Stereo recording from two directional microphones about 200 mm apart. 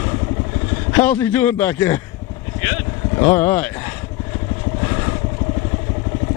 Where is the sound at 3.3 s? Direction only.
10° left (ahead or behind).